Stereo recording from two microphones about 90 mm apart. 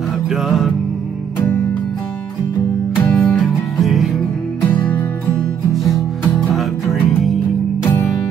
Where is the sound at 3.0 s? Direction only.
5° left (ahead or behind).